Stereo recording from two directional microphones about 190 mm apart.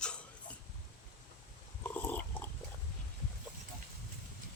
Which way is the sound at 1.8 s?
10° left (ahead or behind).